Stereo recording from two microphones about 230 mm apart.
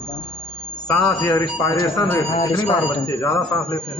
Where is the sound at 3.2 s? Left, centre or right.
Centre.